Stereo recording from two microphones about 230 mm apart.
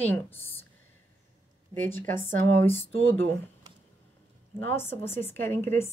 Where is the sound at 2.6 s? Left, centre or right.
Centre.